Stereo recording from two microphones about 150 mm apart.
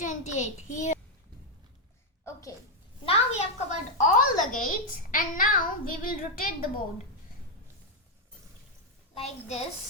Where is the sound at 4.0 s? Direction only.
60° left (ahead or behind).